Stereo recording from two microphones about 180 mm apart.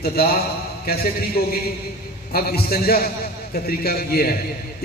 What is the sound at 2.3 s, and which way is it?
A man's voice, 60° left (ahead or behind).